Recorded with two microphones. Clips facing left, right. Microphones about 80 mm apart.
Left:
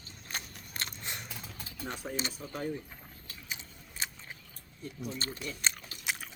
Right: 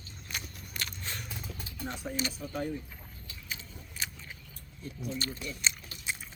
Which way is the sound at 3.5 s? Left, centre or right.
Left.